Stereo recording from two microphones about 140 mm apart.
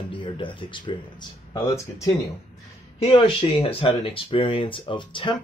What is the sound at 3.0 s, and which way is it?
Speech, 40° left (ahead or behind).